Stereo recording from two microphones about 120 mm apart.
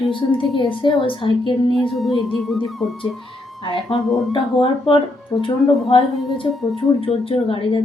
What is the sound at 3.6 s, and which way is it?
A woman's voice, 45° left (ahead or behind).